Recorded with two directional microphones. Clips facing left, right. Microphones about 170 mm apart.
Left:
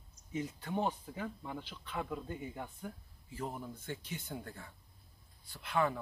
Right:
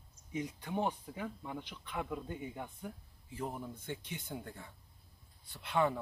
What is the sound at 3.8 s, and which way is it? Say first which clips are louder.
Speech: even; 20° right (ahead or behind).